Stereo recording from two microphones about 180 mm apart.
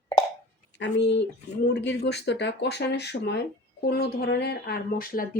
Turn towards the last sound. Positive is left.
turn(degrees=55)  # may be behind; listen again after turning